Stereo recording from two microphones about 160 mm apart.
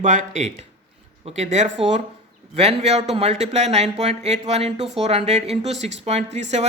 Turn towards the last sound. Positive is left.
turn(degrees=-45)  # may be behind; listen again after turning